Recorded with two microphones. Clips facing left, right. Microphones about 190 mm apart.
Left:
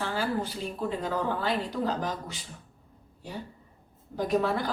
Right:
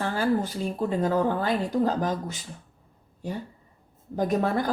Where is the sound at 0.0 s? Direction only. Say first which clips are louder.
Right 5 dB; 50° right (ahead or behind).